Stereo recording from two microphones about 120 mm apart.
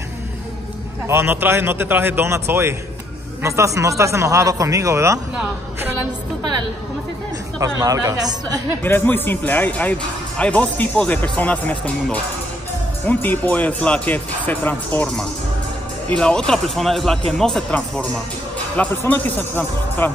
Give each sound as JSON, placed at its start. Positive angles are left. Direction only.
{"t": 1.0, "sound": "speech", "side_deg": -20}
{"t": 7.5, "sound": "speech", "side_deg": -30}
{"t": 8.8, "sound": "speech", "side_deg": 15}